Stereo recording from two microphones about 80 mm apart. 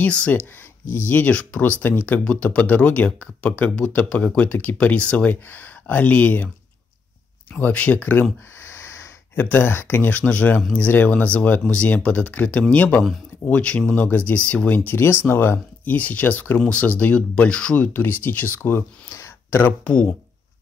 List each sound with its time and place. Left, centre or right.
0.0 s speech: centre
7.5 s speech: centre; by 9.1 s left
9.3 s speech: left
14.9 s speech: left
19.0 s a sound: left
19.5 s speech: centre